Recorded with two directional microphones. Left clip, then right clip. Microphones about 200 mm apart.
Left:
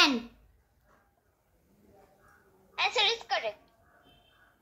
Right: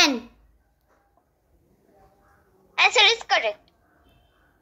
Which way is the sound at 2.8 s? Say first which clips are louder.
Right 10 dB; 30° right (ahead or behind).